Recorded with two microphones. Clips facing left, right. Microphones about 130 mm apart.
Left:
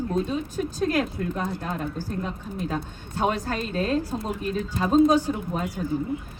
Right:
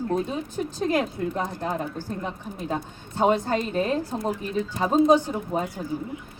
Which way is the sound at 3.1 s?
20° right (ahead or behind).